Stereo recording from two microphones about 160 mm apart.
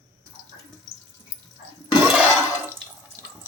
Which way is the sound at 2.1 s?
5° right (ahead or behind).